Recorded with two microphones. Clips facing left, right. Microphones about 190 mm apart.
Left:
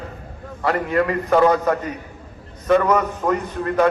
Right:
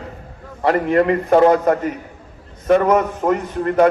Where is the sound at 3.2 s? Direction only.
25° right (ahead or behind).